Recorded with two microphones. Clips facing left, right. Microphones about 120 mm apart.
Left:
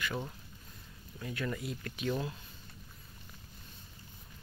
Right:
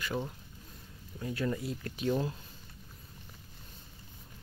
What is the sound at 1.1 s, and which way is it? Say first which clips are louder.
Speech: right 4 dB; 30° right (ahead or behind).